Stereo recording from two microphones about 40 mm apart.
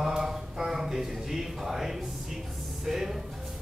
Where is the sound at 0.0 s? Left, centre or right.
Centre.